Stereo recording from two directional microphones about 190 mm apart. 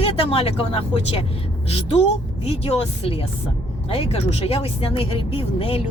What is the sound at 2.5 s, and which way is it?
Speech, 30° left (ahead or behind).